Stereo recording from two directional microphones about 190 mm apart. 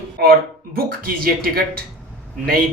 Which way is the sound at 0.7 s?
50° right (ahead or behind).